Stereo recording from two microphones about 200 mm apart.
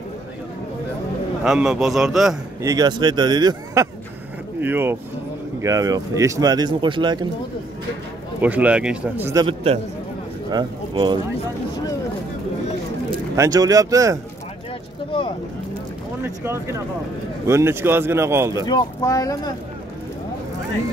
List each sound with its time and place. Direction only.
1.4 s a man's voice: centre (ahead or behind)
2.6 s speech: 20° right (ahead or behind)
8.4 s speech: 10° right (ahead or behind)
9.5 s speech: 30° right (ahead or behind)
13.4 s speech: 20° right (ahead or behind)
16.4 s speech: 15° right (ahead or behind)
18.7 s speech: 20° left (ahead or behind)